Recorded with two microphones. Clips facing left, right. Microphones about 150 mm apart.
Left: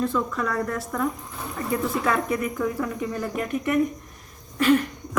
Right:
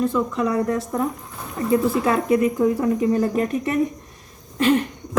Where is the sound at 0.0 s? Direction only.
15° right (ahead or behind).